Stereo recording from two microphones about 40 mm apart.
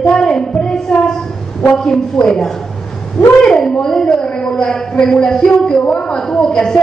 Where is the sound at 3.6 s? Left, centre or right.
Centre.